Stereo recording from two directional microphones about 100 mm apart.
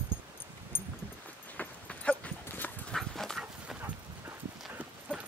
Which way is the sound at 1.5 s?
15° left (ahead or behind).